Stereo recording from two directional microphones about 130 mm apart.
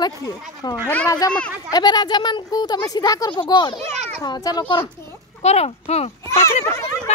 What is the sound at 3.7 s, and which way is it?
Speech, 55° right (ahead or behind).